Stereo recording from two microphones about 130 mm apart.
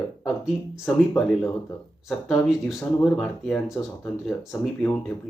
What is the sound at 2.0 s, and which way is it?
Speech, centre (ahead or behind).